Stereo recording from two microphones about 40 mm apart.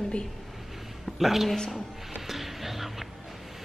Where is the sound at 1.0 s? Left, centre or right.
Centre.